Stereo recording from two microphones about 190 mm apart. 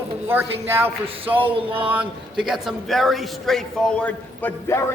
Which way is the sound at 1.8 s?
10° right (ahead or behind).